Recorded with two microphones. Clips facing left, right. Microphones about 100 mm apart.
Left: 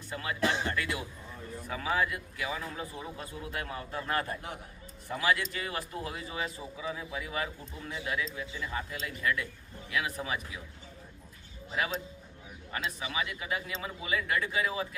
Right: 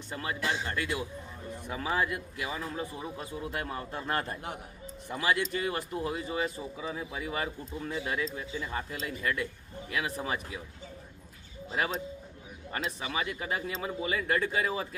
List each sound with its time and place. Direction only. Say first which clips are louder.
0.1 s speech: left 2 dB; 30° right (ahead or behind)
11.7 s speech: right 2 dB; 35° right (ahead or behind)